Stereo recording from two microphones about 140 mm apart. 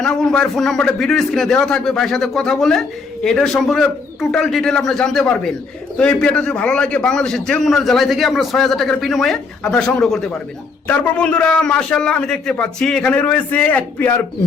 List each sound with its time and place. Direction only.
0.0 s a man's voice: 5° left (ahead or behind)